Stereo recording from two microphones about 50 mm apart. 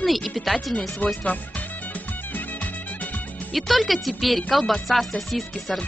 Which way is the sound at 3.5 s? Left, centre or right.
Centre.